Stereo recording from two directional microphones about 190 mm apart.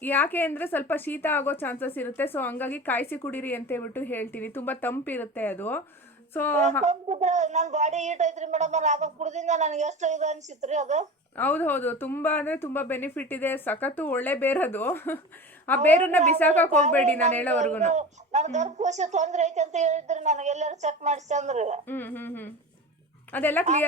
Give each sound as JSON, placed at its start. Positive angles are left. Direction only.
{"t": 0.0, "sound": "speech", "side_deg": 10}
{"t": 6.8, "sound": "a woman's voice", "side_deg": -35}
{"t": 11.3, "sound": "speech", "side_deg": 10}
{"t": 17.7, "sound": "a woman's voice", "side_deg": -40}
{"t": 21.8, "sound": "speech", "side_deg": 10}